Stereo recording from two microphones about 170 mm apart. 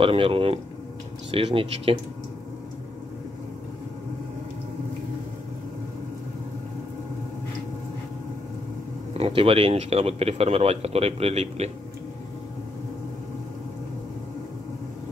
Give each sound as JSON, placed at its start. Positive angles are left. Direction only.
{"t": 0.0, "sound": "speech", "side_deg": -30}
{"t": 9.2, "sound": "speech", "side_deg": -35}